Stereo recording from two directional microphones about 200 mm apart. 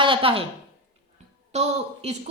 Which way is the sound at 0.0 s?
25° right (ahead or behind).